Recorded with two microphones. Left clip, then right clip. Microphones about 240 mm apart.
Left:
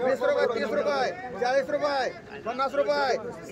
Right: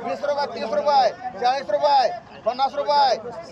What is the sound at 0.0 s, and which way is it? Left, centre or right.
A man's voice, centre.